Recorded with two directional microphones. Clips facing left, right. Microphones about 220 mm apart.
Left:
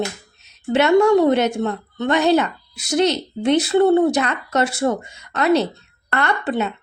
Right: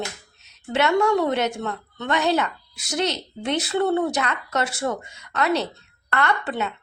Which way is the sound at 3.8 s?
30° left (ahead or behind).